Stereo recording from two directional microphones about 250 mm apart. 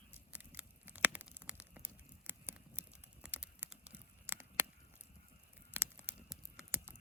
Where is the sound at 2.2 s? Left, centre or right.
Centre.